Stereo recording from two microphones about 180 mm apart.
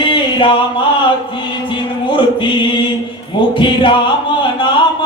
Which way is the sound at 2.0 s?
25° left (ahead or behind).